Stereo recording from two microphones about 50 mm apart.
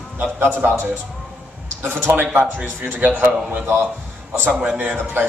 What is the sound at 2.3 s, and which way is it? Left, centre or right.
A man's voice, right.